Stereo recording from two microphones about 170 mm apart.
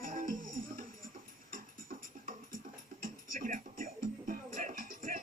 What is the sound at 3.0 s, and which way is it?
Music, 50° right (ahead or behind).